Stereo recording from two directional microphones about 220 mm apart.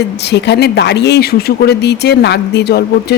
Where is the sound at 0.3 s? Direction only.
50° left (ahead or behind).